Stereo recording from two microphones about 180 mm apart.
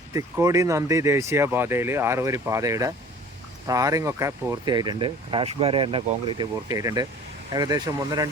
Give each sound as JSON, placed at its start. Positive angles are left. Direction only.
{"t": 0.1, "sound": "speech", "side_deg": -15}